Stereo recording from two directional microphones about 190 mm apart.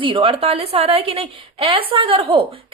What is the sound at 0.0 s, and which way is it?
A woman's voice, 25° right (ahead or behind).